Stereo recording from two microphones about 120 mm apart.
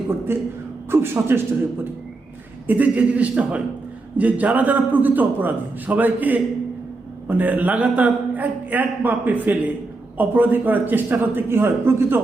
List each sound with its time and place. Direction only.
0.3 s a man's voice: 20° right (ahead or behind)
2.6 s a man's voice: 15° right (ahead or behind)